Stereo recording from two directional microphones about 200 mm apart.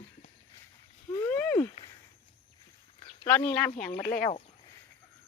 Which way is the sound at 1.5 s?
25° left (ahead or behind).